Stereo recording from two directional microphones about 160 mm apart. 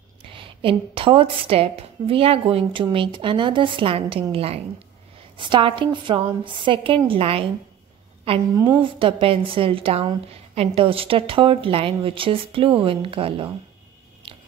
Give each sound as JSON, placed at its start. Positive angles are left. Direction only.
{"t": 0.3, "sound": "a woman's voice", "side_deg": -35}
{"t": 14.2, "sound": "biting", "side_deg": -35}